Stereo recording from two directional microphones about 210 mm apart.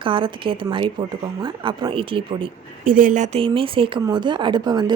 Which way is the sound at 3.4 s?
25° right (ahead or behind).